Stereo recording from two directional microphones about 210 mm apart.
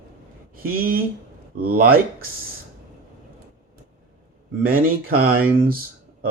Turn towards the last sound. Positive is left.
turn(degrees=-45)  # may be behind; listen again after turning